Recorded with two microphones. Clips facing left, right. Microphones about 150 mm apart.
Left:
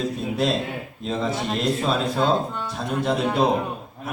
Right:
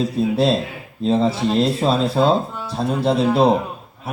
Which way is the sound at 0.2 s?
35° right (ahead or behind).